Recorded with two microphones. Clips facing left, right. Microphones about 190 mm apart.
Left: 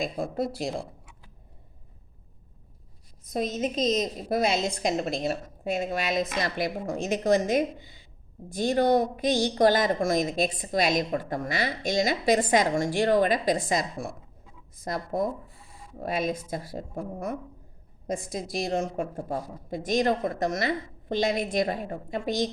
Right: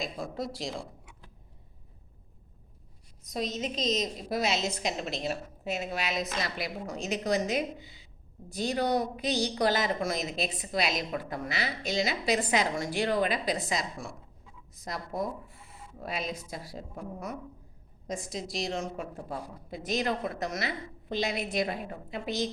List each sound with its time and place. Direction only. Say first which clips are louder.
0.0 s speech: left 6 dB; 55° left (ahead or behind)
3.2 s a woman's voice: left 5 dB; 50° left (ahead or behind)